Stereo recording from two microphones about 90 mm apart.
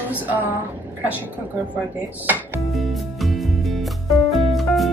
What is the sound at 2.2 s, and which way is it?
Speech, 20° right (ahead or behind).